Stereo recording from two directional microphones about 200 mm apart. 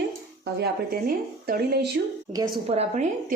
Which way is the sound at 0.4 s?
50° right (ahead or behind).